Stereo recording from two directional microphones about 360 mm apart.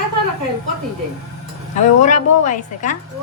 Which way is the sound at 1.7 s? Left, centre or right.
Centre.